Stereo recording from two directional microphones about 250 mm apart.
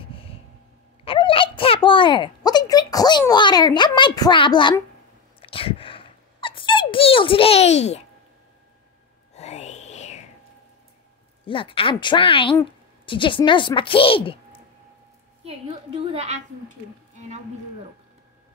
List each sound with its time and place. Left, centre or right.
0.0 s vehicle: left
1.0 s a child's voice: left
5.4 s squeak: left
9.3 s a sound: left
11.4 s speech: centre
15.4 s a woman's voice: right